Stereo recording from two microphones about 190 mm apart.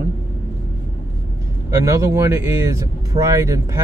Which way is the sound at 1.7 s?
15° right (ahead or behind).